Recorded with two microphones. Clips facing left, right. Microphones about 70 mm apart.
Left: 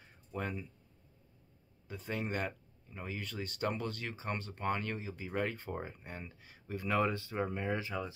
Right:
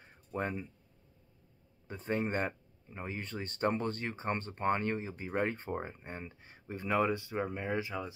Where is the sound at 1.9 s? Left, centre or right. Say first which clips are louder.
Right 4 dB; right; by 8.0 s centre.